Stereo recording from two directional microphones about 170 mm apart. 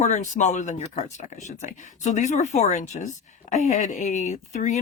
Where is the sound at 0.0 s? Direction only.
45° left (ahead or behind).